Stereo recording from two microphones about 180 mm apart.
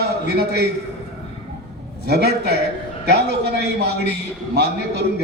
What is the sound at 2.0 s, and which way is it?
A man's voice, 65° right (ahead or behind).